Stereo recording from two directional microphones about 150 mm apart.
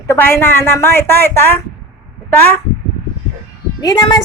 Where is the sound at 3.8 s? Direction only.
30° left (ahead or behind).